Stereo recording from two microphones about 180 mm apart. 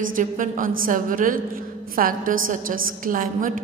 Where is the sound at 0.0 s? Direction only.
50° right (ahead or behind).